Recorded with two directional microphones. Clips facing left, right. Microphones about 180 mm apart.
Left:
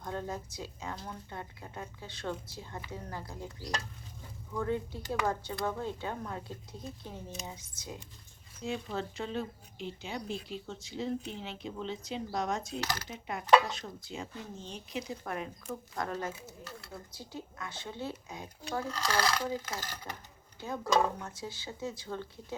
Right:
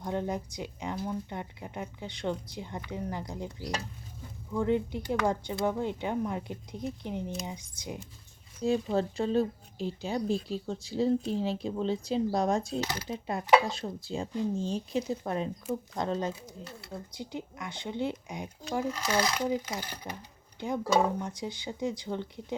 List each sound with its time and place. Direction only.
0.0 s speech: 15° right (ahead or behind)
8.6 s speech: 35° right (ahead or behind); by 22.5 s 20° right (ahead or behind)